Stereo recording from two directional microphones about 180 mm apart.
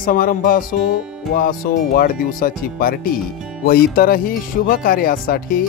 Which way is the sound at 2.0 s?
50° left (ahead or behind).